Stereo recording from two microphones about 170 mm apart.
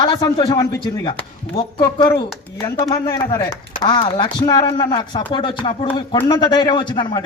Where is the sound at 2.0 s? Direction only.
25° left (ahead or behind).